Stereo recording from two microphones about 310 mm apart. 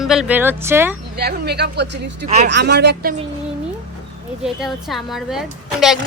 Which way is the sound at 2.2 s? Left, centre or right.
Right.